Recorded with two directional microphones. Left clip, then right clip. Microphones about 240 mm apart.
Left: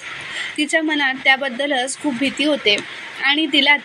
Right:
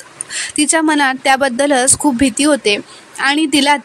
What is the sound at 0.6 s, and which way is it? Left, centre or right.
Speech, right.